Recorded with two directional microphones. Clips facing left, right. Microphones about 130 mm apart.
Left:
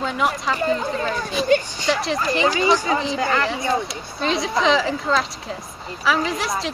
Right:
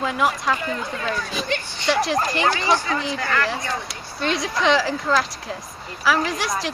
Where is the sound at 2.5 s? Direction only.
15° left (ahead or behind).